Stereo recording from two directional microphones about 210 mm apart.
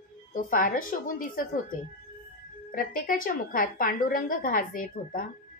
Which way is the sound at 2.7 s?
40° left (ahead or behind).